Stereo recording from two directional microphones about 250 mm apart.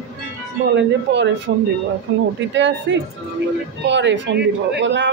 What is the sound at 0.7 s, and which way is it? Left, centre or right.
A woman's voice, right.